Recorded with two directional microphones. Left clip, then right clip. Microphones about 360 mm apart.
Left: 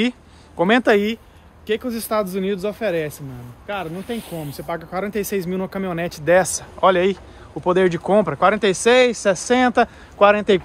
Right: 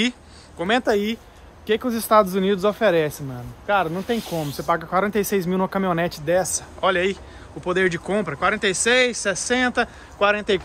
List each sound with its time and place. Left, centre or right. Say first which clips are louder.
0.6 s speech: left 5 dB; centre
0.9 s speech: left 4 dB; centre
6.4 s speech: left 5 dB; left